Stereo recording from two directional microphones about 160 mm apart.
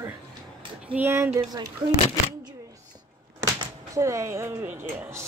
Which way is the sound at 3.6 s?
20° right (ahead or behind).